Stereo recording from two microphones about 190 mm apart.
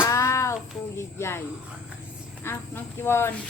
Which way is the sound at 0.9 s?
15° left (ahead or behind).